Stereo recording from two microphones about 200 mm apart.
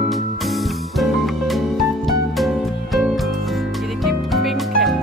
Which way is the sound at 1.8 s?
Centre (ahead or behind).